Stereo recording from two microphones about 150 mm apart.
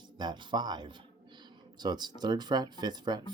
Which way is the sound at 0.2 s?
30° right (ahead or behind).